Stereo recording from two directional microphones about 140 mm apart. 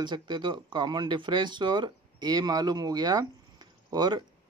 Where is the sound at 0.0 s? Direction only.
30° right (ahead or behind).